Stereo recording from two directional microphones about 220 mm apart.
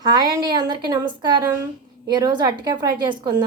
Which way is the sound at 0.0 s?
20° right (ahead or behind).